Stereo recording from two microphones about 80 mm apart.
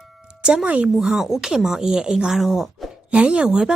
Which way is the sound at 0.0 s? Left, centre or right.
Centre.